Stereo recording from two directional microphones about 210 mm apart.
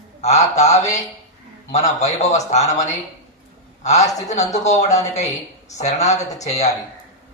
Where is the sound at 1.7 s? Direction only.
30° left (ahead or behind).